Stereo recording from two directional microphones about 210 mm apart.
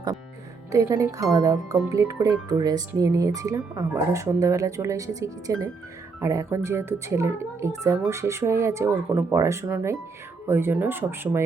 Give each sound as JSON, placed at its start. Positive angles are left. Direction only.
{"t": 0.7, "sound": "speech", "side_deg": -15}